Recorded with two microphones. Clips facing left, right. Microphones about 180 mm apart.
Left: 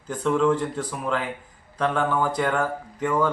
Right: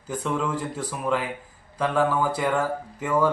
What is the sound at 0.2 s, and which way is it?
A man's voice, 5° right (ahead or behind).